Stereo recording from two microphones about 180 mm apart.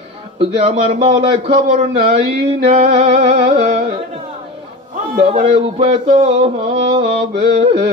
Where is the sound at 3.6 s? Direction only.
35° right (ahead or behind).